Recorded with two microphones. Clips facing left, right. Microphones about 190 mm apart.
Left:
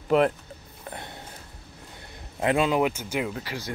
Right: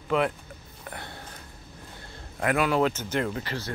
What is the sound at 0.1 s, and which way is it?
Speech, 40° left (ahead or behind).